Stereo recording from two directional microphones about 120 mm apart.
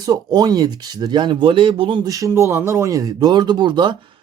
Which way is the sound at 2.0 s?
30° right (ahead or behind).